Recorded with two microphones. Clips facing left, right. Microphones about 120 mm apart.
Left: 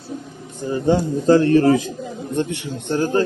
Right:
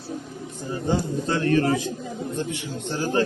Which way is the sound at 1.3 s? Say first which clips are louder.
Left 9 dB; 35° left (ahead or behind).